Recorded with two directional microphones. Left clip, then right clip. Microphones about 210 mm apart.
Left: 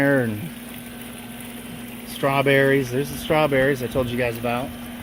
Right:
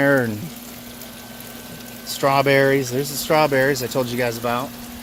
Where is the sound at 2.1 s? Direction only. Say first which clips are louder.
Right 3 dB; 15° right (ahead or behind).